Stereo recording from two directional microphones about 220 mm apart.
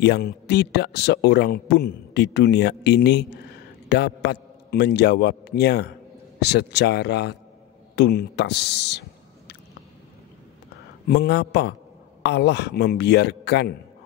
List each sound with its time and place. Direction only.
0.0 s a man's voice: 50° left (ahead or behind)
11.1 s a man's voice: 50° left (ahead or behind)